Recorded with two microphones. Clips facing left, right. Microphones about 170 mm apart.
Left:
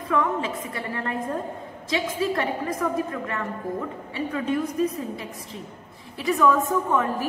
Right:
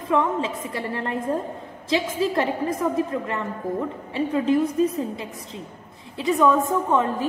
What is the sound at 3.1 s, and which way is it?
Speech, 20° right (ahead or behind).